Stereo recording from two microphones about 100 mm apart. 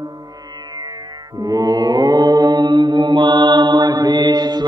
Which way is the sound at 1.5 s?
40° right (ahead or behind).